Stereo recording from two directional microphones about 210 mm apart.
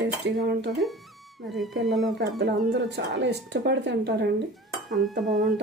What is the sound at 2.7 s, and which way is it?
Speech, 55° right (ahead or behind).